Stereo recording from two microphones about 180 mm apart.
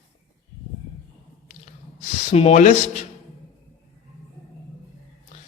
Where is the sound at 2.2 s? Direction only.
35° left (ahead or behind).